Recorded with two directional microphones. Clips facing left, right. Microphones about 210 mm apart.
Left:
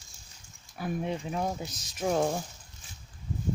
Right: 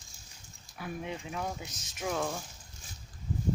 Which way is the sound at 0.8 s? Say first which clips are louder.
Left 6 dB; 35° left (ahead or behind).